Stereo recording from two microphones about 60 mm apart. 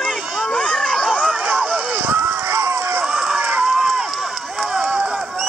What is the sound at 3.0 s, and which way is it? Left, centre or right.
Run, centre.